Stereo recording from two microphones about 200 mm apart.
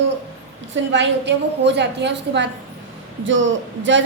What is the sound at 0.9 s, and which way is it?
A woman's voice, 60° right (ahead or behind).